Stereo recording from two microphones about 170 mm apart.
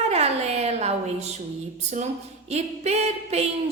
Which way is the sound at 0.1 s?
40° right (ahead or behind).